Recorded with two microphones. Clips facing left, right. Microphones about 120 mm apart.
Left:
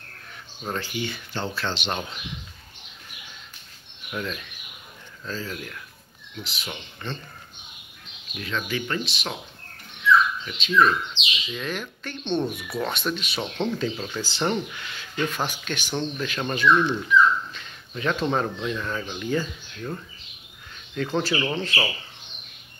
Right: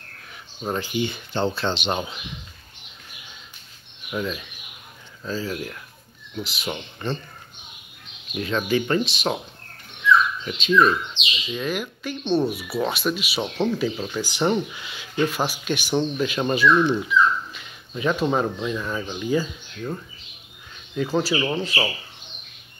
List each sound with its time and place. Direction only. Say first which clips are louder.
0.7 s speech: right 4 dB; 15° right (ahead or behind)
4.1 s speech: right 4 dB; 10° right (ahead or behind)
6.6 s speech: right 6 dB; 25° right (ahead or behind)
8.4 s speech: right 7 dB; 30° right (ahead or behind)
10.4 s speech: right 2 dB; 15° right (ahead or behind)